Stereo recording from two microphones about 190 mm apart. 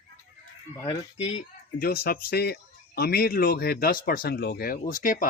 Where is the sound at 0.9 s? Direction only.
35° left (ahead or behind).